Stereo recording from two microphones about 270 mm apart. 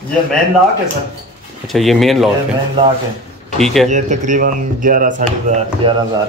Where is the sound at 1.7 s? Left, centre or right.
Centre.